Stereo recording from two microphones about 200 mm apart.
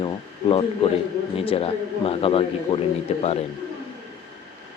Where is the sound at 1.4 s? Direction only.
30° left (ahead or behind).